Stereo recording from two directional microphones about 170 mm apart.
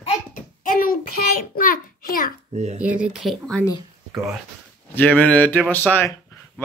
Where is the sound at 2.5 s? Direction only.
40° right (ahead or behind).